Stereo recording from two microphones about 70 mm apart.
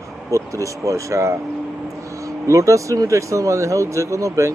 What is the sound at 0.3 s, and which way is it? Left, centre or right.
Speech, right.